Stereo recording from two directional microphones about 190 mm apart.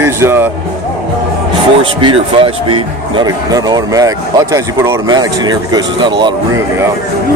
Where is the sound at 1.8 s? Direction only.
25° right (ahead or behind).